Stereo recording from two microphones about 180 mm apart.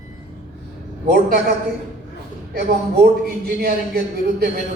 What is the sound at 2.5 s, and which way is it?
A man's voice, 60° right (ahead or behind).